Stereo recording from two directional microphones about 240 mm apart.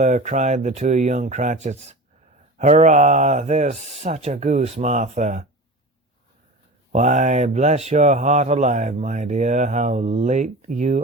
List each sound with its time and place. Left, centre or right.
0.0 s speech: right
6.9 s speech: right